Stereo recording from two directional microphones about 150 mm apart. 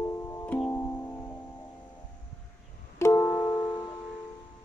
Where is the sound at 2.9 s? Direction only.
20° left (ahead or behind).